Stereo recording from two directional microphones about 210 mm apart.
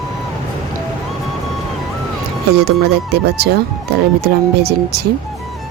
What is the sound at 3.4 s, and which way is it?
Speech, 50° right (ahead or behind).